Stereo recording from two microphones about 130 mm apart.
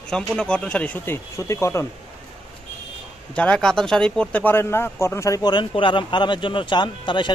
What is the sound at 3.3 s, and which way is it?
Speech, 5° left (ahead or behind).